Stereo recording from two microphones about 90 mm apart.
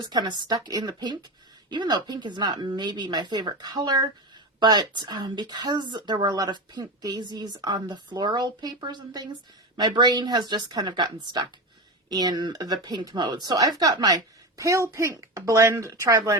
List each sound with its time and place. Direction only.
0.0 s a woman's voice: 50° right (ahead or behind)
14.6 s a woman's voice: 35° right (ahead or behind)